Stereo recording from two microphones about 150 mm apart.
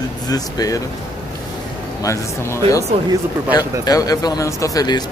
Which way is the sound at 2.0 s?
20° left (ahead or behind).